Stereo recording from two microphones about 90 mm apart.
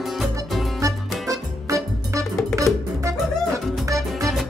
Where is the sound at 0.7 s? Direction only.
35° right (ahead or behind).